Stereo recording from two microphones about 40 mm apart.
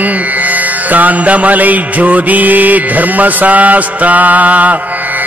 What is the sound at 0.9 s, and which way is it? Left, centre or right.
Mantra, right.